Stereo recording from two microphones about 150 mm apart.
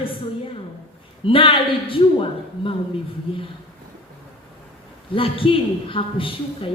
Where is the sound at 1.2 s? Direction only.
35° left (ahead or behind).